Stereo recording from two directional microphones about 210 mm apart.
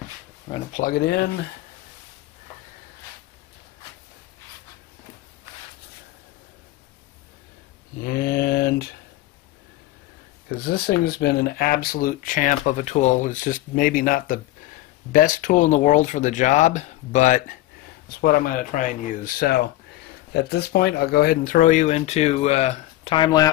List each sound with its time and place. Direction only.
0.7 s speech: 40° left (ahead or behind)
8.0 s mantra: 45° left (ahead or behind)
10.5 s speech: 45° left (ahead or behind); by 23.5 s 20° left (ahead or behind)